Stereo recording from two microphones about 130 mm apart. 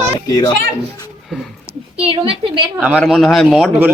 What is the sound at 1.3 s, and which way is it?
Speech, centre (ahead or behind).